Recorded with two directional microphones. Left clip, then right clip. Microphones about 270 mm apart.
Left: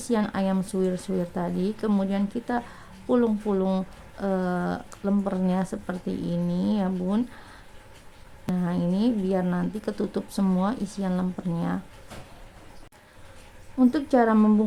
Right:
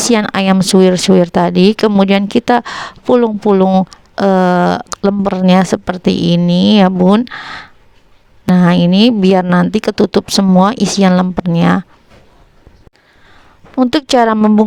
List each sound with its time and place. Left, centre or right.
0.0 s speech: right
13.7 s speech: right